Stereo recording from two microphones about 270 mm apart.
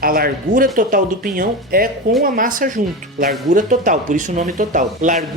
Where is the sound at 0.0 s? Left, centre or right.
Right.